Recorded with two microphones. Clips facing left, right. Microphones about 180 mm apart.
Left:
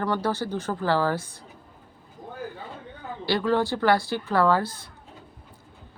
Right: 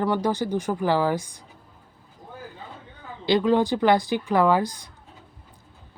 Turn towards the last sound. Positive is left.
turn(degrees=-15)  # may be behind; listen again after turning